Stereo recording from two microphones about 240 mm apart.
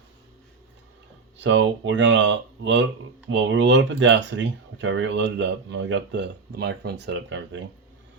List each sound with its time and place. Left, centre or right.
1.4 s speech: right